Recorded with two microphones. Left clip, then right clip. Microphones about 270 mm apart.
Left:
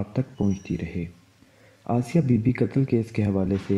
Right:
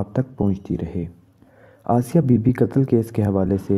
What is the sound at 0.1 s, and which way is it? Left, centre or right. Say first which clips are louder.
Speech: right 4 dB; right.